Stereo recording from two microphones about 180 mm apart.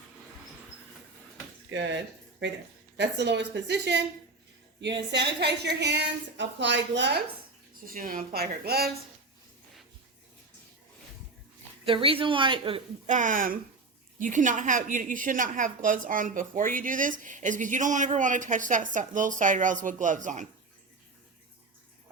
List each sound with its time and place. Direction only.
1.7 s a woman's voice: 80° right
5.1 s a woman's voice: 70° right (ahead or behind)
7.9 s speech: 50° right (ahead or behind)
11.9 s speech: 30° right (ahead or behind)
13.1 s a woman's voice: 45° right (ahead or behind)